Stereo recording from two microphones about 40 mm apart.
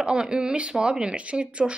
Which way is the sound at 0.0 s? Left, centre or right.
Right.